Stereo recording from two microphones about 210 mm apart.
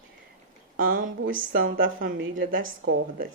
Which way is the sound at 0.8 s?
40° right (ahead or behind).